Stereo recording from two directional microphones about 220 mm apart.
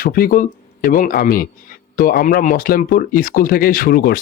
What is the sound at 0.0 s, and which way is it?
A man's voice, 40° left (ahead or behind).